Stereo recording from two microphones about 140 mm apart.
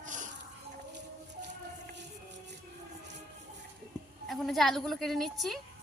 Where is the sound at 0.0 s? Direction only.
65° right (ahead or behind).